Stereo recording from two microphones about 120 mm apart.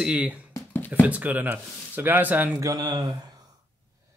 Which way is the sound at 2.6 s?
30° right (ahead or behind).